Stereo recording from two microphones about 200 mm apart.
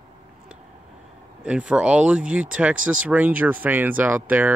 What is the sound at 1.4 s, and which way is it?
Speech, 5° right (ahead or behind).